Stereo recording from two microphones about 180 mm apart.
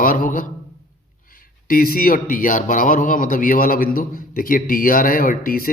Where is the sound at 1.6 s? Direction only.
55° left (ahead or behind).